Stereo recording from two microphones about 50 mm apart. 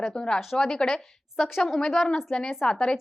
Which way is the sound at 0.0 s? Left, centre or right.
Centre.